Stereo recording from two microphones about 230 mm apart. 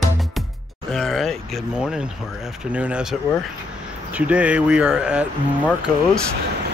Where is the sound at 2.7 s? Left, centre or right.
Centre.